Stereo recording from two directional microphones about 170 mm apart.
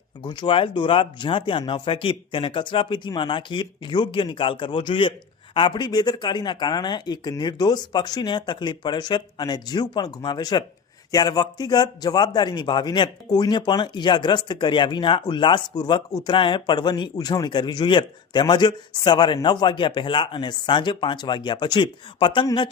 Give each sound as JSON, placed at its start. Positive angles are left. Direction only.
{"t": 0.2, "sound": "a man's voice", "side_deg": 25}